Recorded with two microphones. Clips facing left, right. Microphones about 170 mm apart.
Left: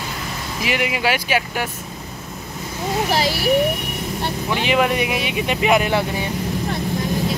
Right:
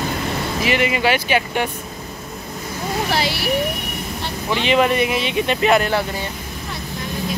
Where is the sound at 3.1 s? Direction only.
40° left (ahead or behind).